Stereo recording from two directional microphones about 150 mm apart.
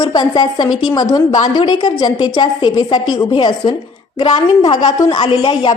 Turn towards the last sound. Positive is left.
turn(degrees=35)  # may be behind; listen again after turning